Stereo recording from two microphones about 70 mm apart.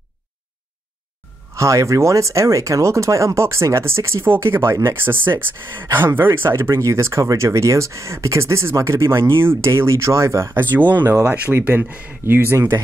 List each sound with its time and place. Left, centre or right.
1.5 s speech: right
10.5 s speech: right